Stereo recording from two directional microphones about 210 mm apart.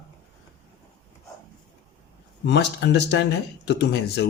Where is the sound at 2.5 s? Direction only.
55° left (ahead or behind).